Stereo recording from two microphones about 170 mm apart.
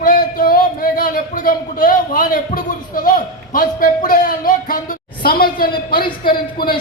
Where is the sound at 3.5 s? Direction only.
55° left (ahead or behind).